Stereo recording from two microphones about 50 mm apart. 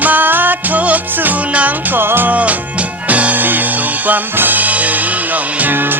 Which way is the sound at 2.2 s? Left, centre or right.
Right.